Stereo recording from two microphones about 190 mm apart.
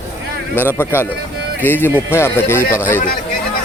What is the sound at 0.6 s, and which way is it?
Speech, 10° left (ahead or behind).